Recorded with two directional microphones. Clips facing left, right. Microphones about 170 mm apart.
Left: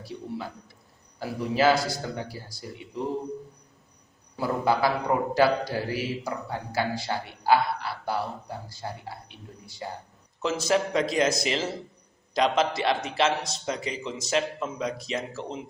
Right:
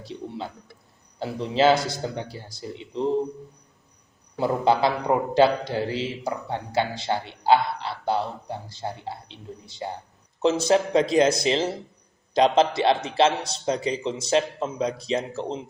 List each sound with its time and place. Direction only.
0.0 s a man's voice: 25° right (ahead or behind)
4.4 s a man's voice: 25° right (ahead or behind)